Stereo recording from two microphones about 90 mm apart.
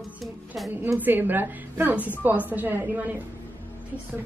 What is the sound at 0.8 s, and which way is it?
A woman's voice, 20° right (ahead or behind).